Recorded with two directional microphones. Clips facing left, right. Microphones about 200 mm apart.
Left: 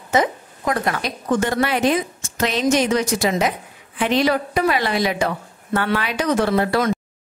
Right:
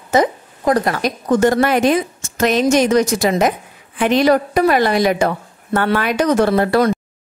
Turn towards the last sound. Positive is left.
turn(degrees=-45)  # may be behind; listen again after turning